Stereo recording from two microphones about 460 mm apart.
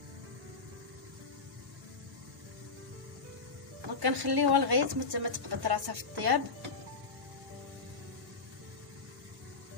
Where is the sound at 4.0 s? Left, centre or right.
Right.